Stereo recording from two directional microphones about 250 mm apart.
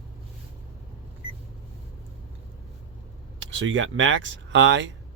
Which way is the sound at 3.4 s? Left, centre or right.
Right.